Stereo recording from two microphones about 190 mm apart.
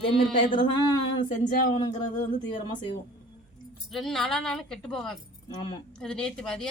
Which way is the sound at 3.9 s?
Centre (ahead or behind).